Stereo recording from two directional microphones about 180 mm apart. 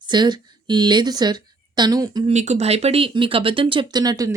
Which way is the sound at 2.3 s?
40° right (ahead or behind).